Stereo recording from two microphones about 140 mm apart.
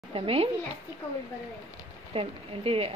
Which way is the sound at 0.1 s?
40° right (ahead or behind).